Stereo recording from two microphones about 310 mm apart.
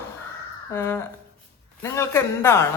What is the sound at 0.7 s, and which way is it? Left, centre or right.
A woman's voice, centre.